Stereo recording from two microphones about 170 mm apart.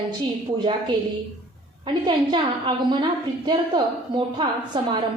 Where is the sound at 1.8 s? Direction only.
25° right (ahead or behind).